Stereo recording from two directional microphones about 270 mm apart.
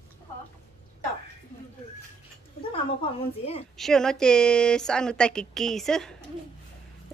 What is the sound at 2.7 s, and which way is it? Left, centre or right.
Speech, centre.